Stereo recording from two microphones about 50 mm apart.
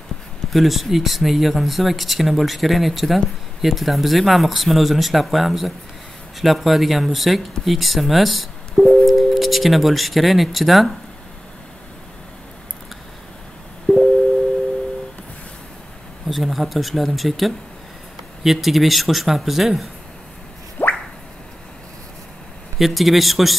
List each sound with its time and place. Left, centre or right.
0.5 s speech: centre
13.9 s busy signal: centre
16.3 s speech: centre
20.8 s drip: left
22.8 s speech: centre